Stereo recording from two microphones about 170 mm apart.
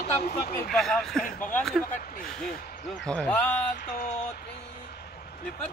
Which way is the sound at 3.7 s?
50° left (ahead or behind).